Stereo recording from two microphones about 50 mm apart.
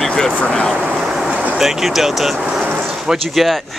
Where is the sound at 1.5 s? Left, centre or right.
Centre.